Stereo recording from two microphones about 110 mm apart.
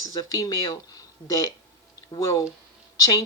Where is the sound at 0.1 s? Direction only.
35° left (ahead or behind).